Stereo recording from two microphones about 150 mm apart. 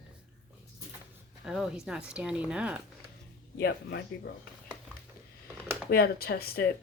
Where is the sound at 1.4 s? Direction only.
Centre (ahead or behind).